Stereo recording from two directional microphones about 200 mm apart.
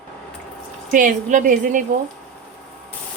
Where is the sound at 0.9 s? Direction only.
40° right (ahead or behind).